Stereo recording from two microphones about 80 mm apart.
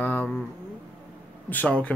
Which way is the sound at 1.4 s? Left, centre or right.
Centre.